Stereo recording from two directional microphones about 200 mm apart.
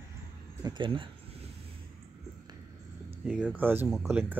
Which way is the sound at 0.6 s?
20° right (ahead or behind).